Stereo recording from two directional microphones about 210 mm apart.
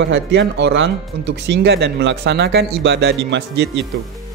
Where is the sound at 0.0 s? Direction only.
55° right (ahead or behind).